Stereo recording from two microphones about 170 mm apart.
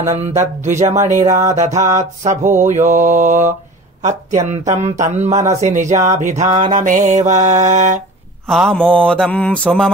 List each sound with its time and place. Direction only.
0.6 s mantra: 45° right (ahead or behind)
4.0 s speech: 45° right (ahead or behind)
4.5 s mantra: 40° right (ahead or behind)
6.5 s mantra: 25° right (ahead or behind)
6.8 s mantra: 50° right (ahead or behind)
8.5 s mantra: 5° left (ahead or behind)